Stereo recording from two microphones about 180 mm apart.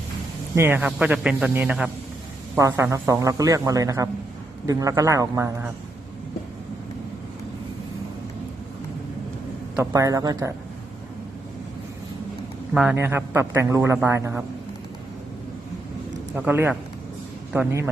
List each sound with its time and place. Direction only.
0.5 s a man's voice: 15° right (ahead or behind)
9.9 s a man's voice: 20° right (ahead or behind)
12.7 s a man's voice: 5° right (ahead or behind)
13.0 s a man's voice: 15° right (ahead or behind)
16.3 s a man's voice: 10° right (ahead or behind)